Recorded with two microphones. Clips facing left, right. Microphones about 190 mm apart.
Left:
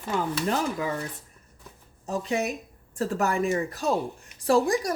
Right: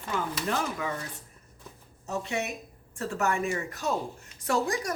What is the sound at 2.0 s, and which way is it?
A woman's voice, 35° left (ahead or behind).